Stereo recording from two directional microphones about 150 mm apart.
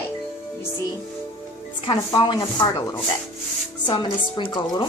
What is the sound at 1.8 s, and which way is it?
Speech, 30° left (ahead or behind).